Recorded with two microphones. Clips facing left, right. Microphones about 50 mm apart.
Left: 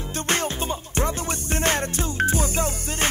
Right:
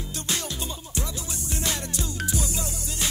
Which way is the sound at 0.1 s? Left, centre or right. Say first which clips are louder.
Left 8 dB; left.